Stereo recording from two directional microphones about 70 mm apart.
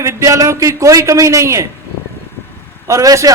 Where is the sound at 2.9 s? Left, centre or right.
Right.